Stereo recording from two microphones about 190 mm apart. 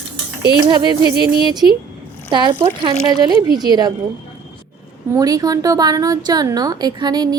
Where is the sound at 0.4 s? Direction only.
25° right (ahead or behind).